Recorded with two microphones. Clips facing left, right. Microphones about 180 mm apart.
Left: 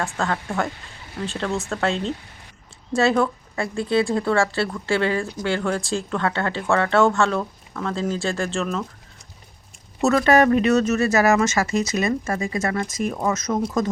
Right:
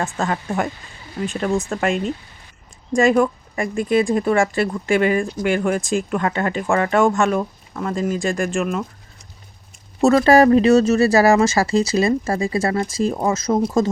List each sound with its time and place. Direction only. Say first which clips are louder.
0.0 s speech: right 2 dB; 15° right (ahead or behind)
10.0 s speech: right 4 dB; 30° right (ahead or behind)